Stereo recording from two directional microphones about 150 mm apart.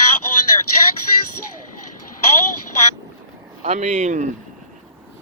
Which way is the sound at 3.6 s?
45° right (ahead or behind).